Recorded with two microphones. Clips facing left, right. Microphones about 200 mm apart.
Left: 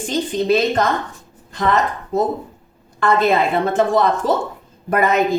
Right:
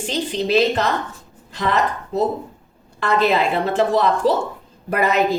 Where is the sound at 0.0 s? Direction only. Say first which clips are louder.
Left 2 dB; 45° left (ahead or behind).